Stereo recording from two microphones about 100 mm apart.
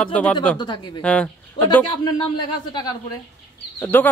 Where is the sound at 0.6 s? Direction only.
50° left (ahead or behind).